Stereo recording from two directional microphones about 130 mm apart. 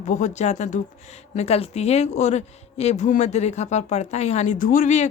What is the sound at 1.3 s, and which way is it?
A woman's voice, 55° left (ahead or behind).